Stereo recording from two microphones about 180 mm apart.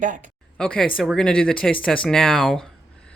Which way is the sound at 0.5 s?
5° left (ahead or behind).